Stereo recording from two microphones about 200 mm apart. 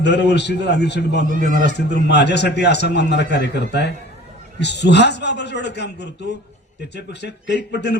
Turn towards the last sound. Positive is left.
turn(degrees=55)  # may be behind; listen again after turning